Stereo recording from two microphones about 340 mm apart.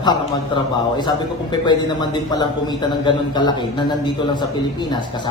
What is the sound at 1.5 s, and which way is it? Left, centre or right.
A man's voice, centre.